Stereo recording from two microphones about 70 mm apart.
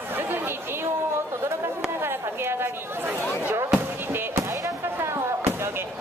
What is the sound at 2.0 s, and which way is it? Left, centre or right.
Chatter, right.